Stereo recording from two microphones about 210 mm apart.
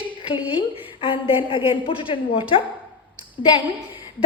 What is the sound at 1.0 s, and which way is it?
A woman's voice, 25° left (ahead or behind).